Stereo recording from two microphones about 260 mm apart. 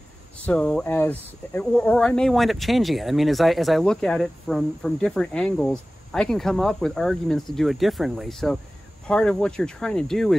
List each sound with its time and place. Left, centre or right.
0.5 s speech: centre